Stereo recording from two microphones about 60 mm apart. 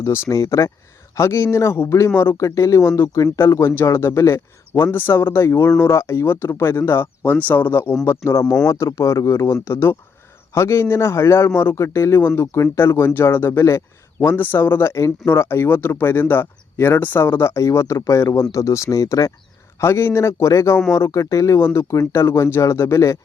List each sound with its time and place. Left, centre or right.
0.0 s speech: left
2.4 s speech: left
3.5 s speech: left
8.0 s speech: left
12.7 s speech: left
13.5 s speech: left
14.3 s speech: left
17.5 s speech: left
19.8 s speech: left
21.6 s speech: left